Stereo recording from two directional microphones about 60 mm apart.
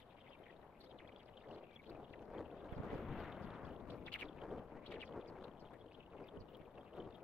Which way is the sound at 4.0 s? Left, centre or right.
Left.